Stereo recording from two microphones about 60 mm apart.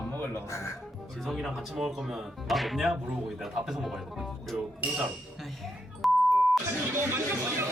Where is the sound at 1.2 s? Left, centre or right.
Centre.